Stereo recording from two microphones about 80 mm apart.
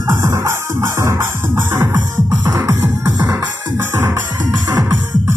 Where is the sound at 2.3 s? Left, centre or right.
Right.